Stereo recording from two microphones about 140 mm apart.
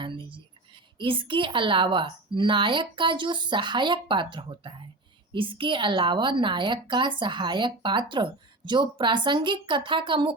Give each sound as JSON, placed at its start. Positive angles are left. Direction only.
{"t": 0.0, "sound": "whispering", "side_deg": -35}
{"t": 0.9, "sound": "a woman's voice", "side_deg": -35}